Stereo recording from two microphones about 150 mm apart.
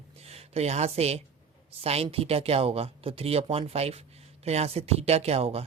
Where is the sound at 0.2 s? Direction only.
45° right (ahead or behind).